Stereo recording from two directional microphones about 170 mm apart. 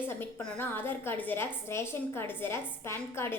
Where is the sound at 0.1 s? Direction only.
15° left (ahead or behind).